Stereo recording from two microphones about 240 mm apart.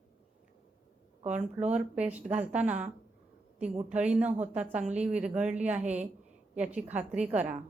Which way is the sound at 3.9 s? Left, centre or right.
Centre.